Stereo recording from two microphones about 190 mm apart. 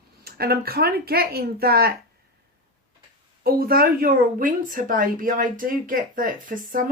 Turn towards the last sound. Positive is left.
turn(degrees=-45)  # may be behind; listen again after turning